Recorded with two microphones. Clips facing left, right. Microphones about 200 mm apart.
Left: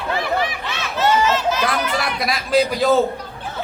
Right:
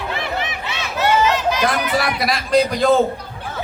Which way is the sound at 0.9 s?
15° right (ahead or behind).